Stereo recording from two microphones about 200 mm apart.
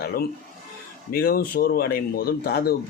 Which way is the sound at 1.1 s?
50° left (ahead or behind).